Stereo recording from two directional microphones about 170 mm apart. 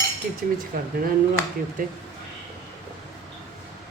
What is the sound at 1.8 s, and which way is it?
Speech, 55° right (ahead or behind).